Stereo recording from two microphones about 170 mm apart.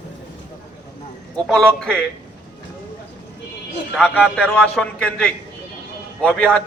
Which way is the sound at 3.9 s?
5° left (ahead or behind).